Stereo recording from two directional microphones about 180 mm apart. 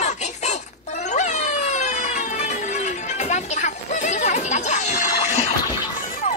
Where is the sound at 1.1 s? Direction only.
40° left (ahead or behind).